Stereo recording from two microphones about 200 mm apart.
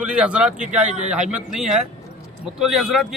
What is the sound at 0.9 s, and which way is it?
Speech, 35° right (ahead or behind).